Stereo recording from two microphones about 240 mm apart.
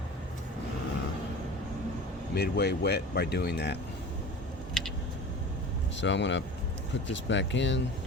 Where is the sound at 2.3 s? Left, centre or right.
Left.